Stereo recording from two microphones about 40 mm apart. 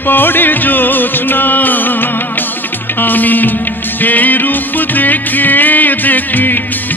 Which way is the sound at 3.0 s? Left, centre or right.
Left.